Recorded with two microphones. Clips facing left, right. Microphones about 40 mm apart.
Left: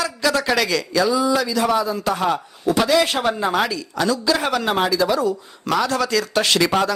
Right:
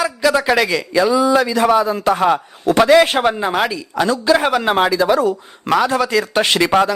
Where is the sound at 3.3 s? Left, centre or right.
Centre.